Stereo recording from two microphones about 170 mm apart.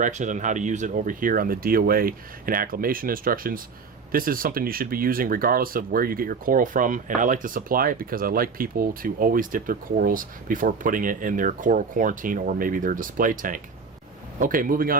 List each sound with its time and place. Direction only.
0.0 s speech: 45° right (ahead or behind)